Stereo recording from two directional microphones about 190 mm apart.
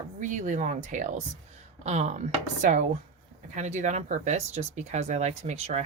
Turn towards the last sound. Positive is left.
turn(degrees=-35)  # may be behind; listen again after turning